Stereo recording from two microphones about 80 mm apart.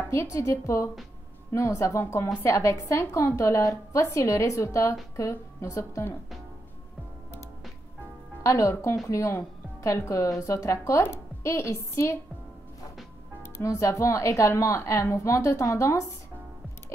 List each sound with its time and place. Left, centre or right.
0.1 s a woman's voice: left
8.4 s speech: left
13.4 s speech: left